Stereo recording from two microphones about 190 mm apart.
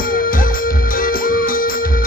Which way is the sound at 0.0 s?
50° left (ahead or behind).